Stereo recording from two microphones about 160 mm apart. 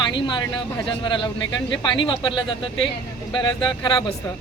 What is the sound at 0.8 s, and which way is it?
Speech, 30° left (ahead or behind).